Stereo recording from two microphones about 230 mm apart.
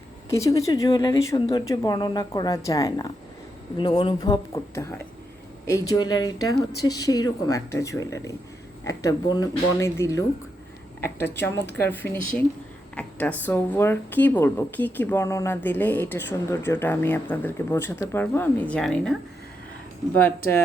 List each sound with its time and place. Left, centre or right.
0.3 s speech: centre
20.2 s speech: centre